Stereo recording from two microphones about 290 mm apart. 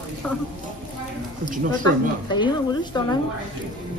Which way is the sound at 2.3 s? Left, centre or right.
Centre.